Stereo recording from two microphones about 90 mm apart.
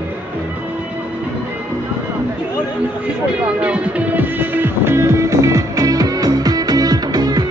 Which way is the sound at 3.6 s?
15° right (ahead or behind).